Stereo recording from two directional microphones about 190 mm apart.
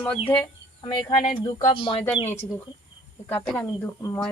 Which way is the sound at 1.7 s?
25° left (ahead or behind).